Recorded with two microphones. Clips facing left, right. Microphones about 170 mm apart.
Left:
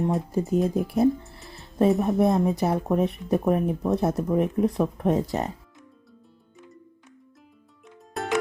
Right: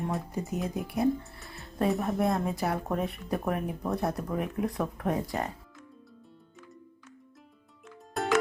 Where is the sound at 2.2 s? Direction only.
20° left (ahead or behind).